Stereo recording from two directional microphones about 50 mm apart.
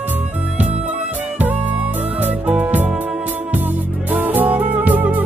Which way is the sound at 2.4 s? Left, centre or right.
Right.